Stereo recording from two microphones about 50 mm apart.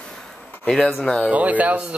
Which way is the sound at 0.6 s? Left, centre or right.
Centre.